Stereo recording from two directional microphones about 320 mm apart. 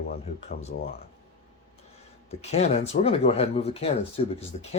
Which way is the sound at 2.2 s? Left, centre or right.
Left.